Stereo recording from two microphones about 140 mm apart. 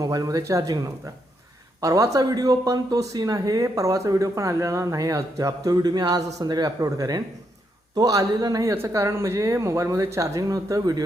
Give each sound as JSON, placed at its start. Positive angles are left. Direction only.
{"t": 0.0, "sound": "speech", "side_deg": -25}